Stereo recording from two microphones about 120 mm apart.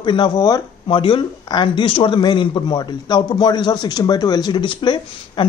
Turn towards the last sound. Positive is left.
turn(degrees=40)  # may be behind; listen again after turning